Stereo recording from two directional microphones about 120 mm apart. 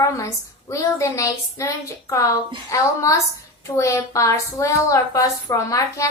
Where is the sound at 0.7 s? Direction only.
25° left (ahead or behind).